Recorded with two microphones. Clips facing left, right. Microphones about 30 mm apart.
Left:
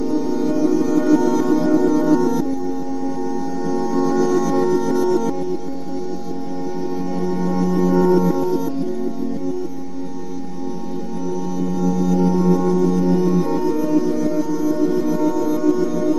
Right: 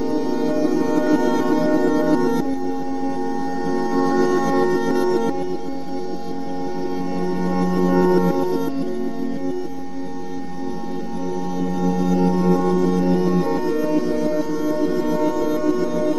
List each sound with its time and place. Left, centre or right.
0.3 s music: right
3.6 s music: right
7.2 s music: right
11.8 s music: right
12.3 s music: right
12.5 s music: right